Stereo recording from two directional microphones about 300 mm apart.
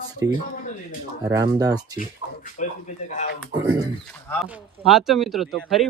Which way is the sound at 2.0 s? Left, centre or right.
Left.